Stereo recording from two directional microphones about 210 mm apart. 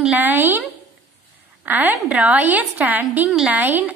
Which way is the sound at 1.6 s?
10° right (ahead or behind).